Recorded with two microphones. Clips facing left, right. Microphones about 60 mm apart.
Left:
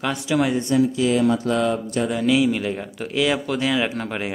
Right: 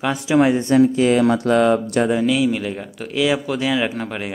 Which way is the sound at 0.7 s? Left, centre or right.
Right.